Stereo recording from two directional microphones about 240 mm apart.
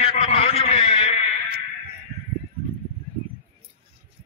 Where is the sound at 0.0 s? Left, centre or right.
Left.